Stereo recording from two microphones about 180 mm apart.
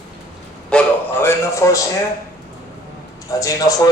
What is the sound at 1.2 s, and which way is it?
Speech, 15° left (ahead or behind).